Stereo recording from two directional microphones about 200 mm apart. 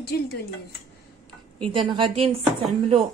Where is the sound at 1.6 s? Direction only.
25° right (ahead or behind).